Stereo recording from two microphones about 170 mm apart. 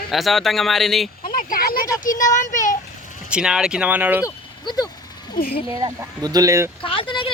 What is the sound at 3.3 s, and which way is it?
Speech, 5° right (ahead or behind).